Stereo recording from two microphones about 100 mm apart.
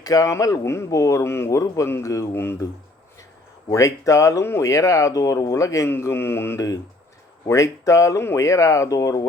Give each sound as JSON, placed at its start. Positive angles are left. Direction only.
{"t": 0.0, "sound": "speech", "side_deg": 35}
{"t": 3.7, "sound": "speech", "side_deg": 35}